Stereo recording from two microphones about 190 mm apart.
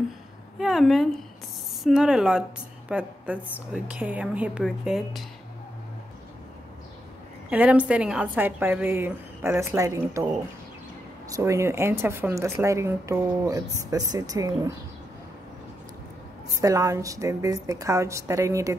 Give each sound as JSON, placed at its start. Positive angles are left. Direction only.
{"t": 0.6, "sound": "speech", "side_deg": 0}
{"t": 7.4, "sound": "speech", "side_deg": -5}
{"t": 11.2, "sound": "speech", "side_deg": -15}
{"t": 16.6, "sound": "speech", "side_deg": -15}